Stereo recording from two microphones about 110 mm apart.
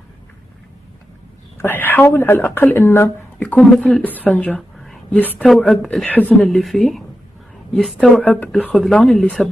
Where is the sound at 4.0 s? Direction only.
15° left (ahead or behind).